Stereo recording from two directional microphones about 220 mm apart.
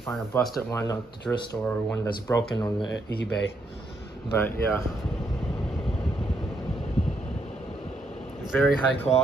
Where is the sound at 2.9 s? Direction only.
50° left (ahead or behind).